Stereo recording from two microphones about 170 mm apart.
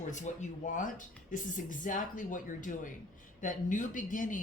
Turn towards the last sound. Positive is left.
turn(degrees=50)  # may be behind; listen again after turning